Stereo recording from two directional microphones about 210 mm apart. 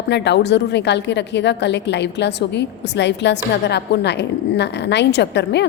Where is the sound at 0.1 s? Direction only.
55° left (ahead or behind).